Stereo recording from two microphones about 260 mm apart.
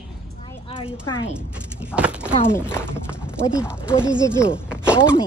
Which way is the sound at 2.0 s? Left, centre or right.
Centre.